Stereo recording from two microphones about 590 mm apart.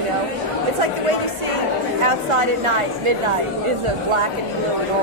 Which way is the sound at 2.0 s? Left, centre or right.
Right.